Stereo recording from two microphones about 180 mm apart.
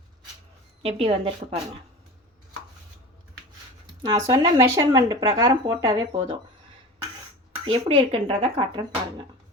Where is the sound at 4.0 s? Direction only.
20° right (ahead or behind).